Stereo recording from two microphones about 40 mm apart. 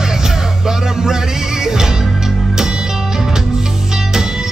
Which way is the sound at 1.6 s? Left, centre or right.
Centre.